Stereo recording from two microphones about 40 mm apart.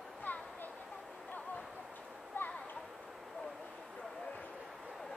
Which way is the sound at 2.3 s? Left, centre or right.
Left.